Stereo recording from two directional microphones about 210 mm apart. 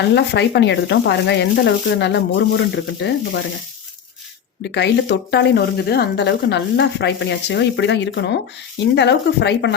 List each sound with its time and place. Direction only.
0.1 s speech: 55° left (ahead or behind)
4.6 s speech: 55° left (ahead or behind)